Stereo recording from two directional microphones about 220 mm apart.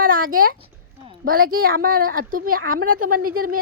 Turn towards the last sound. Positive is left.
turn(degrees=-90)